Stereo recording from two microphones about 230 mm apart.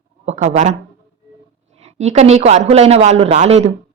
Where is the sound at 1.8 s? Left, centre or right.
Right.